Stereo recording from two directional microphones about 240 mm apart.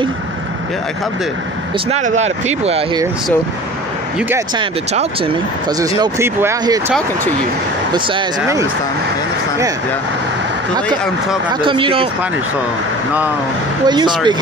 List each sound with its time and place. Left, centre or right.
1.9 s speech: right
4.6 s speech: right
7.9 s speech: centre
11.6 s speech: right
13.8 s speech: centre